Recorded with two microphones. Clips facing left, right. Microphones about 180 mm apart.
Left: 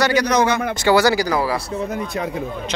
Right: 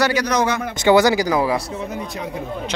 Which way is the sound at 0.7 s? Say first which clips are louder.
Right 3 dB; 20° right (ahead or behind).